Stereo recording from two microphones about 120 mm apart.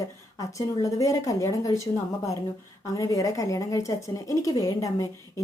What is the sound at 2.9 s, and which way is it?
A woman's voice, 30° left (ahead or behind).